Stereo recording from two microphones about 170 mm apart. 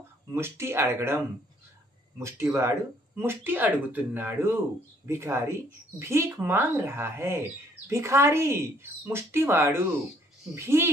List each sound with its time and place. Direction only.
0.3 s speech: 15° right (ahead or behind)